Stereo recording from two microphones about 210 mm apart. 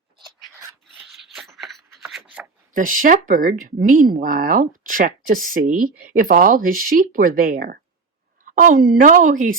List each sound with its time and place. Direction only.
0.9 s rub: centre (ahead or behind)
2.7 s speech: 40° right (ahead or behind)